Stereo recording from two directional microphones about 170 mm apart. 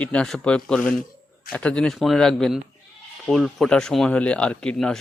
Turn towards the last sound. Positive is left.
turn(degrees=5)  # may be behind; listen again after turning